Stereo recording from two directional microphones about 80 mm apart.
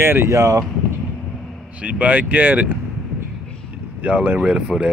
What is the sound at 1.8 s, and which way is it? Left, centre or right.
Speech, centre.